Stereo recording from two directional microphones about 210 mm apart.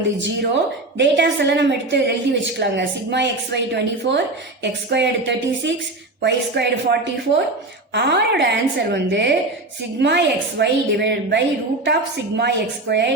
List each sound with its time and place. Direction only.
0.2 s a woman's voice: 60° right (ahead or behind)